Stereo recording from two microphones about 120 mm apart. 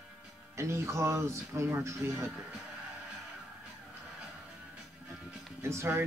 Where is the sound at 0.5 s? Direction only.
25° right (ahead or behind).